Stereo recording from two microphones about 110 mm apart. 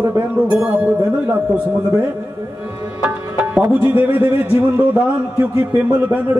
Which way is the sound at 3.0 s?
10° right (ahead or behind).